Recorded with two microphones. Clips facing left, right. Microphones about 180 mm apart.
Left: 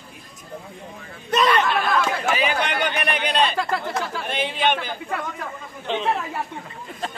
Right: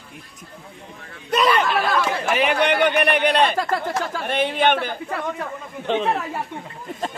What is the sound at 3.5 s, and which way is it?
Speech, 40° right (ahead or behind).